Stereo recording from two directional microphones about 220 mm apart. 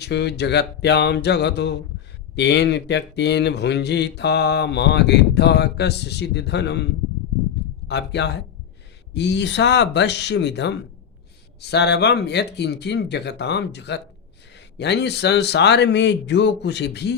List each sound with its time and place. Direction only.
0.0 s speech: 50° left (ahead or behind)
7.9 s speech: 50° left (ahead or behind)